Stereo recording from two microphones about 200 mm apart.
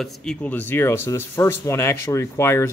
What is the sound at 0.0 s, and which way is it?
Speech, centre (ahead or behind).